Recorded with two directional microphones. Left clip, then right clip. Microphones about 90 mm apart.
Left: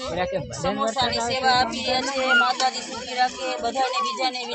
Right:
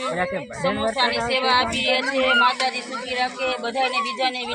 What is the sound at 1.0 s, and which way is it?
Speech, 25° left (ahead or behind).